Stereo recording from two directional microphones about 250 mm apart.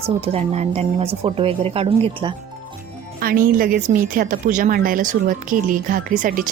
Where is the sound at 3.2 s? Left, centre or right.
Right.